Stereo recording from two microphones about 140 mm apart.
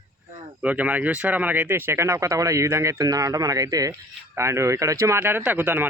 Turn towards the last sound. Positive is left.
turn(degrees=-15)  # may be behind; listen again after turning